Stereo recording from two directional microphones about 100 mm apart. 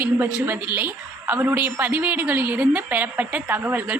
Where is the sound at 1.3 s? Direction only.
20° right (ahead or behind).